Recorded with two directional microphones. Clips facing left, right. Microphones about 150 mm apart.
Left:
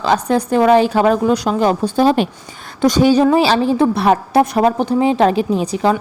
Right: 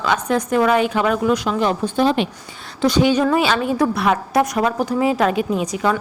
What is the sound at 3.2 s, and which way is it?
A woman's voice, 30° left (ahead or behind).